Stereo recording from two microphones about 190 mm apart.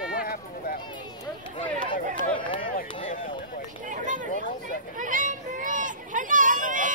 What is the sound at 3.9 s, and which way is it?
Speech, 45° right (ahead or behind).